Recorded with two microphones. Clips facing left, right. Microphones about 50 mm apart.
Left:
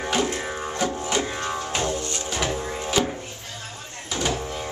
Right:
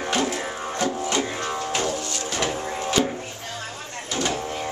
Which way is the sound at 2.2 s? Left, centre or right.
Centre.